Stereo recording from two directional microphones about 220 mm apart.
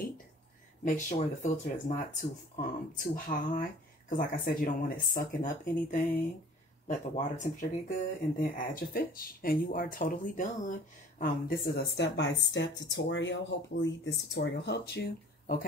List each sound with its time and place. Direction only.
0.8 s speech: 35° left (ahead or behind)